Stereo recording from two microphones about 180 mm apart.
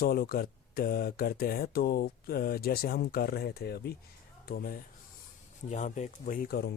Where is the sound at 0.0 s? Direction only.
55° left (ahead or behind).